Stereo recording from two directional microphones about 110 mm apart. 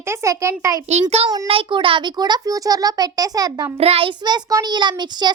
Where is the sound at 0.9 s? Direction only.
75° right (ahead or behind).